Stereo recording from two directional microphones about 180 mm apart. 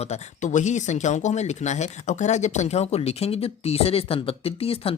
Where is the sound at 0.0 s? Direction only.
40° left (ahead or behind).